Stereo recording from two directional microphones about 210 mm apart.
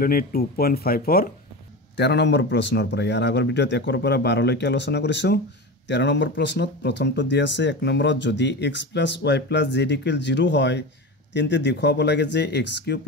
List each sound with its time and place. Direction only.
0.0 s speech: 45° left (ahead or behind)
2.0 s speech: 55° left (ahead or behind)